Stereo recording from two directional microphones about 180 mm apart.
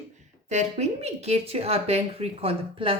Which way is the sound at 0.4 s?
40° right (ahead or behind).